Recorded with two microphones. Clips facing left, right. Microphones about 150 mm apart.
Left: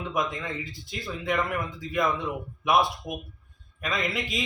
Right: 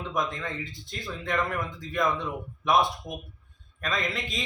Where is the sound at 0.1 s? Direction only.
5° left (ahead or behind).